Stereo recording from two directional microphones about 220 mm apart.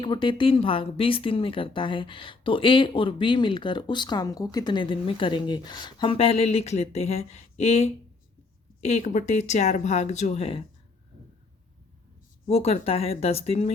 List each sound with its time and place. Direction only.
0.0 s speech: 20° left (ahead or behind)
12.5 s speech: 30° left (ahead or behind)